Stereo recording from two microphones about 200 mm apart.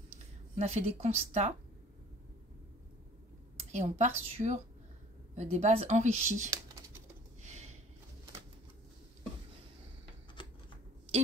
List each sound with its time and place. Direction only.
0.6 s speech: 35° right (ahead or behind)
3.5 s a woman's voice: 35° right (ahead or behind)
6.5 s typing: 15° right (ahead or behind)
7.4 s a sound: 35° right (ahead or behind)
10.4 s shuffling cards: 25° left (ahead or behind)